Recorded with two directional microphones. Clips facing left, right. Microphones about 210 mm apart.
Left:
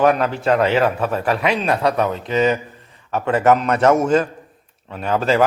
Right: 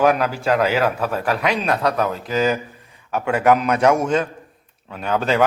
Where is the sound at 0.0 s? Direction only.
Centre (ahead or behind).